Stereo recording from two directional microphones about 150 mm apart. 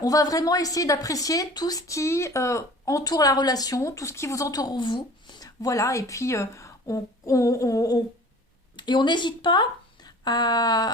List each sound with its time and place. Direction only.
0.0 s a woman's voice: 25° left (ahead or behind)